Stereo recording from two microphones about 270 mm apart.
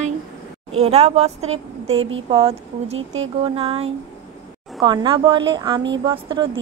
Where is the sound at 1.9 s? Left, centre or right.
Right.